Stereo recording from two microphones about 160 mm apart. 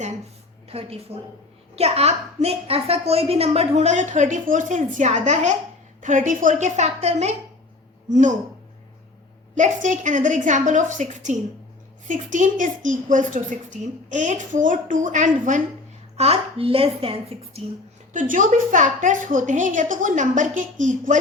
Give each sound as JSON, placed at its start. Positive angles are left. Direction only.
{"t": 0.7, "sound": "a woman's voice", "side_deg": -35}
{"t": 9.6, "sound": "a woman's voice", "side_deg": -50}
{"t": 16.1, "sound": "a woman's voice", "side_deg": -40}
{"t": 18.1, "sound": "a woman's voice", "side_deg": -55}